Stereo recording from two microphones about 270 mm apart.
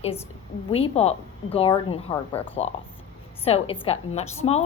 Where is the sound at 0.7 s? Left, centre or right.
Left.